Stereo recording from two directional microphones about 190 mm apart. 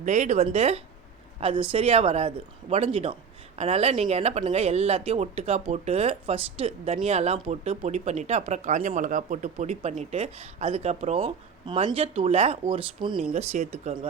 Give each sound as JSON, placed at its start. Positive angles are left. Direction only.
{"t": 0.0, "sound": "speech", "side_deg": -40}